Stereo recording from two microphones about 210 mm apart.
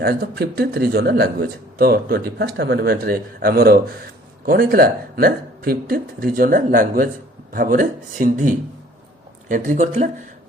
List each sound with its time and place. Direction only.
0.0 s speech: 50° right (ahead or behind)